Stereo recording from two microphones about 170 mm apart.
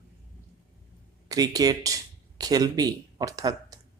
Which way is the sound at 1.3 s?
20° right (ahead or behind).